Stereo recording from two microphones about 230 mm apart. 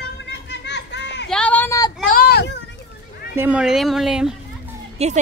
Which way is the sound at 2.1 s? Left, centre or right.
Left.